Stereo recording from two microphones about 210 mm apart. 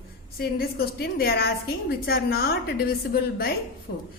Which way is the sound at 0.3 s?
45° left (ahead or behind).